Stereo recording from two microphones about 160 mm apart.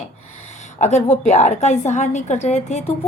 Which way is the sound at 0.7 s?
45° left (ahead or behind).